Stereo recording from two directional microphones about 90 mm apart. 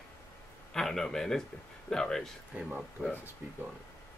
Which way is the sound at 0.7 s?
5° left (ahead or behind).